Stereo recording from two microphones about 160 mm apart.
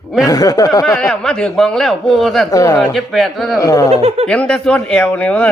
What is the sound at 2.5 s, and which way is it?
Speech, 20° left (ahead or behind).